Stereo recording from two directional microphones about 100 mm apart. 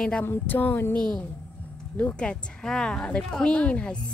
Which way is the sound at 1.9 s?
10° left (ahead or behind).